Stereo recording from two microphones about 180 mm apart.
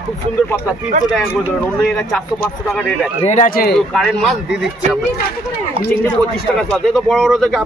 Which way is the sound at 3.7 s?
Centre (ahead or behind).